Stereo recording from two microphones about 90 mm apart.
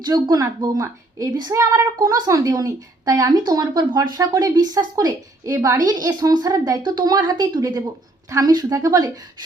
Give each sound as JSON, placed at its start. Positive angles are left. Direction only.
{"t": 0.0, "sound": "a woman's voice", "side_deg": -45}